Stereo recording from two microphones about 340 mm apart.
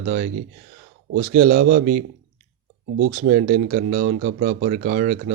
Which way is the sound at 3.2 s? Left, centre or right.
Right.